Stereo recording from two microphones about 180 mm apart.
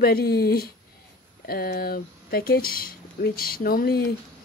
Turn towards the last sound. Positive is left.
turn(degrees=55)  # may be behind; listen again after turning